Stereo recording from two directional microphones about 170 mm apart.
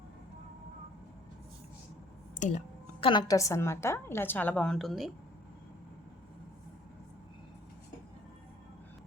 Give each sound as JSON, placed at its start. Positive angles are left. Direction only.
{"t": 2.4, "sound": "speech", "side_deg": 45}
{"t": 3.0, "sound": "a woman's voice", "side_deg": 25}